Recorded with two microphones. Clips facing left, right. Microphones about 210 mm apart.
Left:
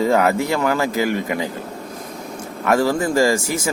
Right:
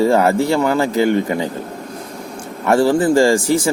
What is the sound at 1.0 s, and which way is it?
Speech, 35° right (ahead or behind).